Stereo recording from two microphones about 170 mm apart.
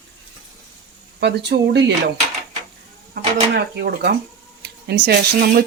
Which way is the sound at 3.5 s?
85° right.